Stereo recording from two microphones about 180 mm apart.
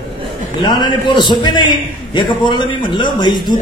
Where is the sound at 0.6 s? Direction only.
25° left (ahead or behind).